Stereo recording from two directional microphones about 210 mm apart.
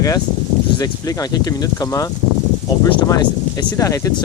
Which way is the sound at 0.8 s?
15° left (ahead or behind).